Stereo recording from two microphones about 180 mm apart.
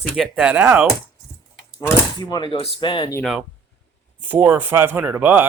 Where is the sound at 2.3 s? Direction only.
25° left (ahead or behind).